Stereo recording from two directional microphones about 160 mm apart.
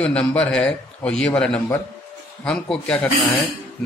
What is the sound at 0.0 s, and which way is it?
A man's voice, 5° left (ahead or behind).